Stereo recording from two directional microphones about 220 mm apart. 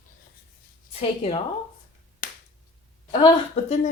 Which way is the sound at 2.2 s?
40° left (ahead or behind).